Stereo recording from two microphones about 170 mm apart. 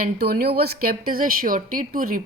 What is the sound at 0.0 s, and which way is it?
A woman's voice, 65° right (ahead or behind).